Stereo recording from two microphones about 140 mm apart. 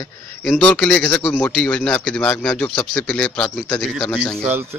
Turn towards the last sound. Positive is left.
turn(degrees=5)  # may be behind; listen again after turning